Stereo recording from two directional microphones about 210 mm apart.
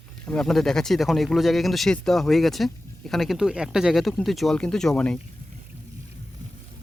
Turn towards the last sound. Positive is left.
turn(degrees=5)  # may be behind; listen again after turning